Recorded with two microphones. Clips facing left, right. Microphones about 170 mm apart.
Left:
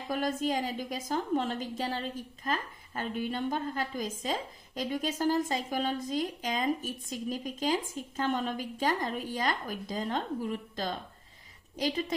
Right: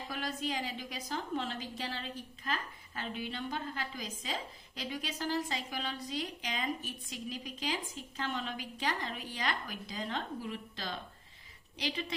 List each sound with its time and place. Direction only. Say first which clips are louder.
0.1 s a woman's voice: left 8 dB; 45° left (ahead or behind)